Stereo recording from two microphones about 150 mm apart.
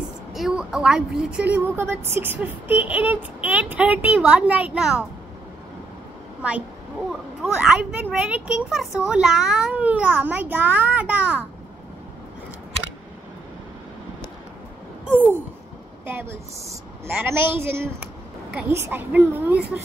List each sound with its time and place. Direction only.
0.3 s a woman's voice: centre (ahead or behind)
7.1 s a woman's voice: 5° right (ahead or behind)
15.0 s a woman's voice: 10° right (ahead or behind)